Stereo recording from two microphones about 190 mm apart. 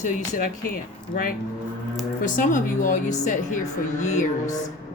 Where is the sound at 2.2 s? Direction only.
45° left (ahead or behind).